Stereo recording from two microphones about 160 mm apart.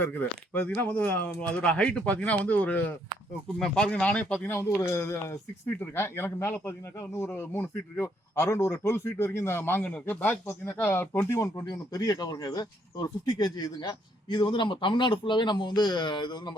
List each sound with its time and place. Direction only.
0.0 s speech: 10° left (ahead or behind); by 16.6 s 30° left (ahead or behind)